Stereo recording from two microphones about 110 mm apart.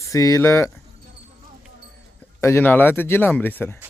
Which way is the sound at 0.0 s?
30° left (ahead or behind).